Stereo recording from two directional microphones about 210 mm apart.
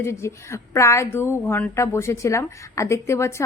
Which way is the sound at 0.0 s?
15° left (ahead or behind).